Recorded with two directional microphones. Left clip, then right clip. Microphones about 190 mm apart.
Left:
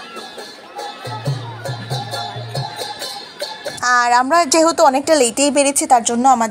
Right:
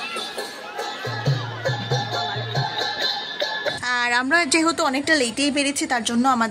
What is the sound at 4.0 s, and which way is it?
Speech, 15° left (ahead or behind).